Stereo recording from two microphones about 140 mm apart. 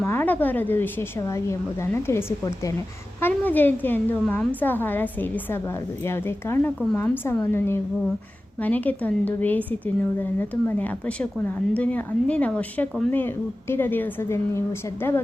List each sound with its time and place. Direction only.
0.0 s a woman's voice: 15° left (ahead or behind)